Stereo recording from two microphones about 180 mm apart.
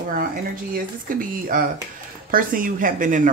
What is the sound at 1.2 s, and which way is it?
Speech, 50° right (ahead or behind).